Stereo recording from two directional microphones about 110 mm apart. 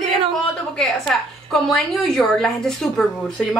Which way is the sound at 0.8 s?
5° left (ahead or behind).